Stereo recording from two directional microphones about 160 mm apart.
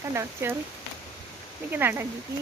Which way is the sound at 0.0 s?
20° right (ahead or behind).